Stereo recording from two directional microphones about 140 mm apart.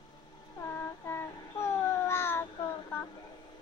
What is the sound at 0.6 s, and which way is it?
Child singing, 20° left (ahead or behind).